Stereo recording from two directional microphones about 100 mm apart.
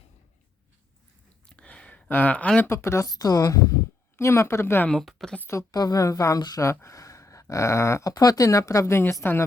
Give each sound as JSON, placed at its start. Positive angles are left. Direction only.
{"t": 1.5, "sound": "a sound", "side_deg": 10}
{"t": 2.6, "sound": "speech", "side_deg": 25}
{"t": 4.2, "sound": "a woman's voice", "side_deg": 30}
{"t": 4.9, "sound": "speech", "side_deg": 0}
{"t": 5.5, "sound": "speech", "side_deg": 35}